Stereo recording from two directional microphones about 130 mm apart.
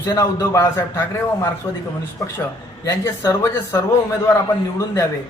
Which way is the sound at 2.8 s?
25° left (ahead or behind).